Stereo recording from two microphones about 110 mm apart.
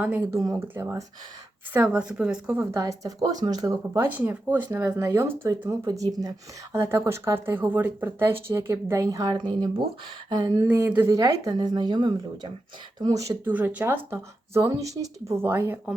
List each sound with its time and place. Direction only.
0.0 s a woman's voice: 15° right (ahead or behind)
1.7 s a woman's voice: 10° right (ahead or behind)
2.6 s speech: 30° right (ahead or behind)
10.7 s speech: 20° right (ahead or behind)
11.1 s speech: 30° right (ahead or behind)
13.5 s speech: 15° right (ahead or behind)